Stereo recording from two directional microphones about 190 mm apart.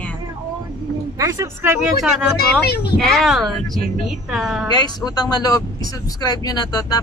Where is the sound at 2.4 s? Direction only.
55° left (ahead or behind).